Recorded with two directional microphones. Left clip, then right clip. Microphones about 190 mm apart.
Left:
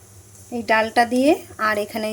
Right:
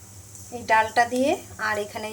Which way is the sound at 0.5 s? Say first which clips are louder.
Left 2 dB; 40° left (ahead or behind).